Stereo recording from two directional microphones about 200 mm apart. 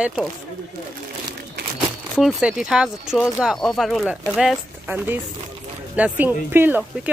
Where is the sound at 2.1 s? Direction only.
5° right (ahead or behind).